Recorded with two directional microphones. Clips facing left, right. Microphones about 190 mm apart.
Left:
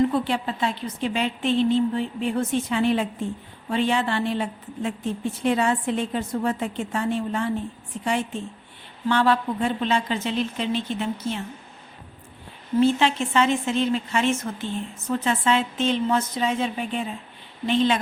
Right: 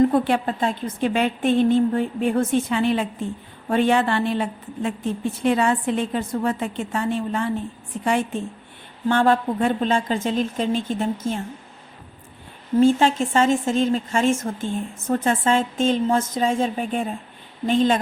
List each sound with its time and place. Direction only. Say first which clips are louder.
0.0 s a woman's voice: right 4 dB; 50° right (ahead or behind)
12.7 s a woman's voice: right 3 dB; 45° right (ahead or behind)